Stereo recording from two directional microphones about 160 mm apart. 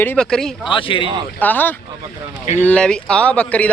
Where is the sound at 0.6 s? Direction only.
30° left (ahead or behind).